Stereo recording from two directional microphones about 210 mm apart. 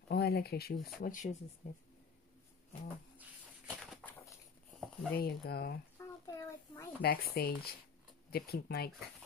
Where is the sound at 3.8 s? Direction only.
Centre (ahead or behind).